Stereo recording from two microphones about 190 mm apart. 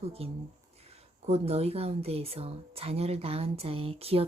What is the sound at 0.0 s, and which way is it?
Speech, 30° right (ahead or behind).